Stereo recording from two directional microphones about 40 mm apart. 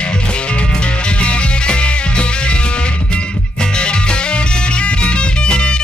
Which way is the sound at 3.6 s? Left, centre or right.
Left.